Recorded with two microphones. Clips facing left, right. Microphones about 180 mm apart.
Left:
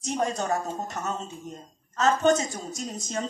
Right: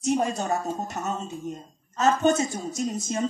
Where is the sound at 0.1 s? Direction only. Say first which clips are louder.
Right 2 dB; 15° right (ahead or behind).